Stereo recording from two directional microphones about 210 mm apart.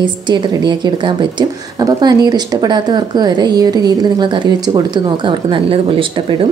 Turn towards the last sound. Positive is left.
turn(degrees=-25)  # may be behind; listen again after turning